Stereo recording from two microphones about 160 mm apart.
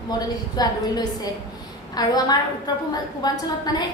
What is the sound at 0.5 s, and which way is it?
A woman's voice, 25° left (ahead or behind).